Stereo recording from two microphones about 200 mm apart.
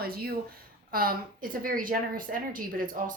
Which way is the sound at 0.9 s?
45° right (ahead or behind).